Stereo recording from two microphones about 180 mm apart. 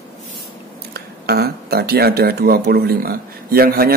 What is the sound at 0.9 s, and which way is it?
Speech, 60° right (ahead or behind).